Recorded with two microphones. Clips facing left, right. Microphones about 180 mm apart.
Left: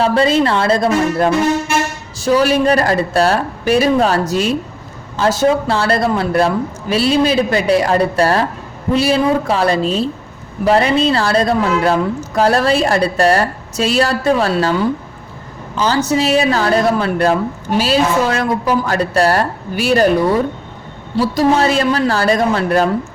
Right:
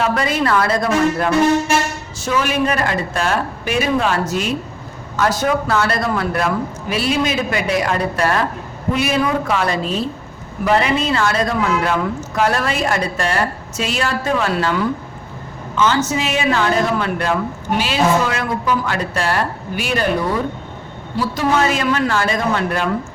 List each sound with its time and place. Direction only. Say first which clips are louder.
0.0 s a woman's voice: left 5 dB; 30° left (ahead or behind)
21.2 s a woman's voice: left 4 dB; 35° left (ahead or behind)